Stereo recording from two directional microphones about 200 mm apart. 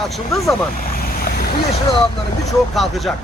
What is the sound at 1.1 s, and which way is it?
Boat, 45° left (ahead or behind).